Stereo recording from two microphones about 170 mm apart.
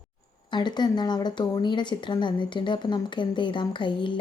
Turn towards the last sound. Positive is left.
turn(degrees=30)  # may be behind; listen again after turning